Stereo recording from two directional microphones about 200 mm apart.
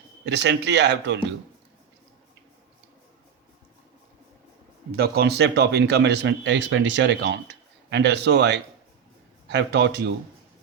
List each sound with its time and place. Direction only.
0.3 s speech: 60° right (ahead or behind)
4.9 s speech: 50° right (ahead or behind)